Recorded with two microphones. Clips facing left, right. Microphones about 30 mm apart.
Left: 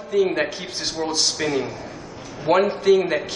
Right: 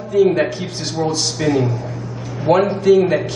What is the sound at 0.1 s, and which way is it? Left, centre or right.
A man's voice, centre.